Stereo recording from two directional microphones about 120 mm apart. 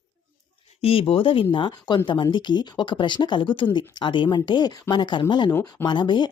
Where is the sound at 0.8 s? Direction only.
50° left (ahead or behind).